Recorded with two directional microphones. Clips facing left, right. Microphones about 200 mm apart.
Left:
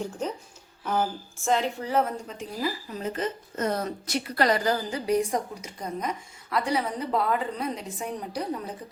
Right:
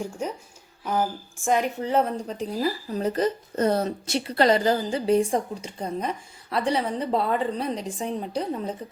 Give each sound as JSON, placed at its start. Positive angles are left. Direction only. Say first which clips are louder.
{"t": 0.0, "sound": "speech", "louder": "right 1 dB", "side_deg": -10}
{"t": 2.2, "sound": "speech", "louder": "right 5 dB", "side_deg": -35}